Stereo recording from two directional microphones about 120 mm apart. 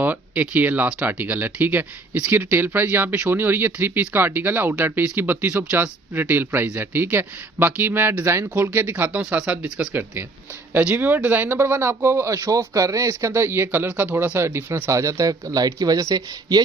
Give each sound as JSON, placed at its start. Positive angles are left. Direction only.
{"t": 0.0, "sound": "speech", "side_deg": -15}
{"t": 9.9, "sound": "speech", "side_deg": -20}